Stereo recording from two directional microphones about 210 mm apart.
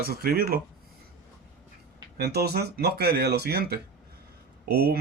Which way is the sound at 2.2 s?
50° right (ahead or behind).